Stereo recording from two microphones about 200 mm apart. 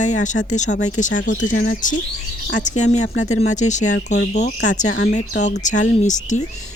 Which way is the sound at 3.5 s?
35° left (ahead or behind).